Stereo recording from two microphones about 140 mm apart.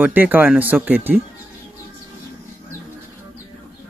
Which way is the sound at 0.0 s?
15° right (ahead or behind).